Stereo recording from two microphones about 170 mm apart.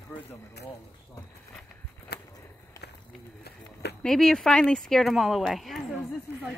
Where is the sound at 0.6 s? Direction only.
70° left (ahead or behind).